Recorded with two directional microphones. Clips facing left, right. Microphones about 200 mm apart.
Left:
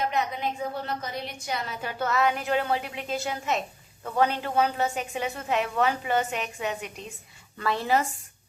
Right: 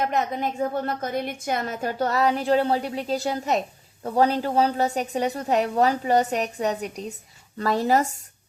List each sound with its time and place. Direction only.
0.0 s a woman's voice: 45° right (ahead or behind)